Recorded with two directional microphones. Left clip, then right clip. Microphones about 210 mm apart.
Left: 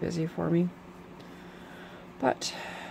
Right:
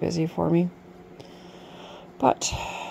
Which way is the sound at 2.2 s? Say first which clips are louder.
Right 6 dB; 25° right (ahead or behind).